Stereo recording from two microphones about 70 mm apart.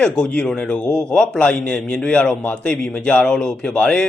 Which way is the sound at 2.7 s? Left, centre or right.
Centre.